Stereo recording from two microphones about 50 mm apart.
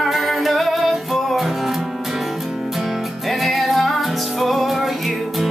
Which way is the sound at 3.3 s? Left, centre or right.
Centre.